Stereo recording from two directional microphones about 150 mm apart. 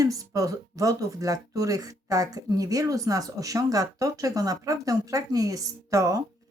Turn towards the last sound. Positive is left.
turn(degrees=-20)  # may be behind; listen again after turning